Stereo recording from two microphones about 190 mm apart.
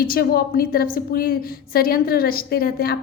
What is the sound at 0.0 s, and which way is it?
A woman's voice, 50° left (ahead or behind).